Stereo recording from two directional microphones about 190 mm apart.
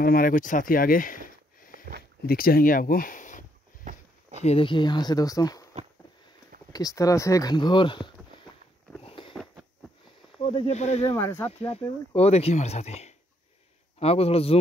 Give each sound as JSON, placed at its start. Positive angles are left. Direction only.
{"t": 0.0, "sound": "speech", "side_deg": 50}
{"t": 3.8, "sound": "a sound", "side_deg": -40}
{"t": 4.4, "sound": "speech", "side_deg": 30}
{"t": 6.7, "sound": "speech", "side_deg": 20}
{"t": 9.0, "sound": "a sound", "side_deg": 30}
{"t": 9.3, "sound": "a sound", "side_deg": 0}
{"t": 10.4, "sound": "speech", "side_deg": 30}
{"t": 11.1, "sound": "speech", "side_deg": 15}
{"t": 11.4, "sound": "speech", "side_deg": 30}